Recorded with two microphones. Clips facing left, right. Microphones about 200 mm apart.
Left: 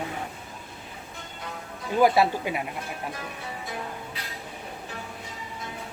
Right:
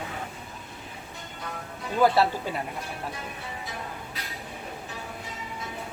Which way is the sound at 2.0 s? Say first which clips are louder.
Left 1 dB; 15° left (ahead or behind).